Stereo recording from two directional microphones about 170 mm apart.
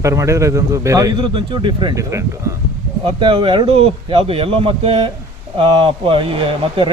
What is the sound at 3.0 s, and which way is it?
Speech, 30° right (ahead or behind).